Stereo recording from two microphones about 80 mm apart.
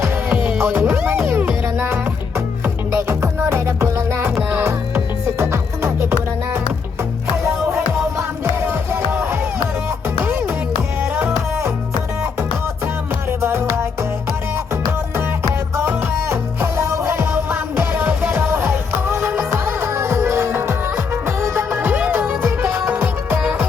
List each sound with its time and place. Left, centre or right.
0.3 s music: right
2.9 s music: right
8.6 s music: right
11.0 s music: right
13.4 s music: right
15.7 s music: right